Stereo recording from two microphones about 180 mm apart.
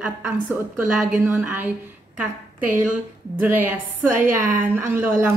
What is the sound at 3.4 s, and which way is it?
A woman's voice, 10° right (ahead or behind).